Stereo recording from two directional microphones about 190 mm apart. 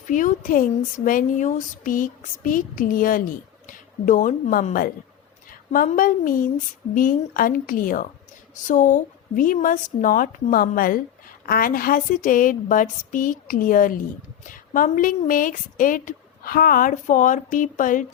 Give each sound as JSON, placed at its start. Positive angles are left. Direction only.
{"t": 0.1, "sound": "speech", "side_deg": 45}